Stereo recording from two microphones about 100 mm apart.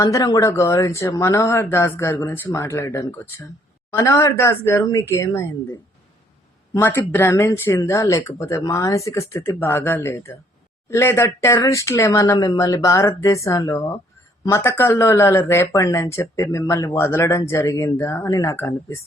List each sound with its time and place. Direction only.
0.0 s speech: 40° left (ahead or behind)
6.7 s speech: 25° left (ahead or behind)